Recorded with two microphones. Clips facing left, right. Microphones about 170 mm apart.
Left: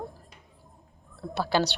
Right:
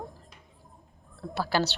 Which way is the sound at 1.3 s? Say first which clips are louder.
Left 2 dB; 20° left (ahead or behind).